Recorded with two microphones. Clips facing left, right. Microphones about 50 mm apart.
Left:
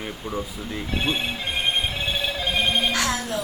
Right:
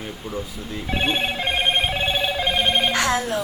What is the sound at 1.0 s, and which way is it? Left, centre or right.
Telephone, right.